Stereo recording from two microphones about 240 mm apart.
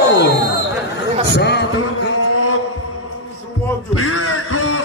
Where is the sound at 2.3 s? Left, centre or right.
Left.